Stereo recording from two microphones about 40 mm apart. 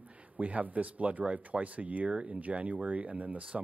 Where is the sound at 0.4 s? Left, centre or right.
Right.